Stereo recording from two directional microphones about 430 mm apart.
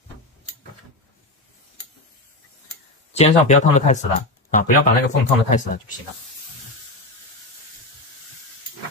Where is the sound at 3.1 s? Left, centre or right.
Centre.